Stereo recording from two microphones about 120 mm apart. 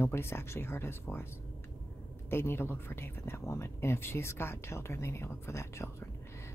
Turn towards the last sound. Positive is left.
turn(degrees=20)  # may be behind; listen again after turning